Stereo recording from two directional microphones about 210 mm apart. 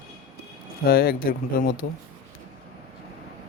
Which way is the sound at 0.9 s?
45° left (ahead or behind).